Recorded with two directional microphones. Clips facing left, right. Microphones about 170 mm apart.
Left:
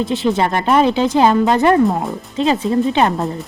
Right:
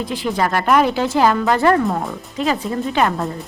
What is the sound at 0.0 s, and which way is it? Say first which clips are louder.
Speech: left 4 dB; 25° left (ahead or behind).